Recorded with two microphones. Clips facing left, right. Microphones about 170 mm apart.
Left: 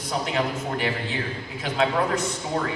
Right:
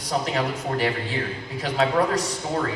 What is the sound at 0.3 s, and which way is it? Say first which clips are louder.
A woman's voice: right 1 dB; 35° right (ahead or behind).